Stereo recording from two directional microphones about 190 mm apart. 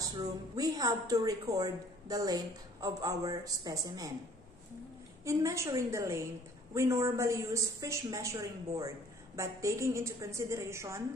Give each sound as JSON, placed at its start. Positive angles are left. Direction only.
{"t": 0.0, "sound": "speech", "side_deg": -20}
{"t": 5.2, "sound": "a woman's voice", "side_deg": -15}